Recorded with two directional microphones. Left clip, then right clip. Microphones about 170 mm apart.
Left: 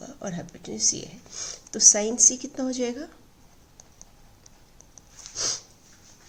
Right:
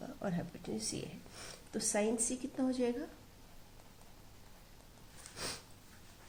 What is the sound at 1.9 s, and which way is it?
A woman's voice, 35° left (ahead or behind).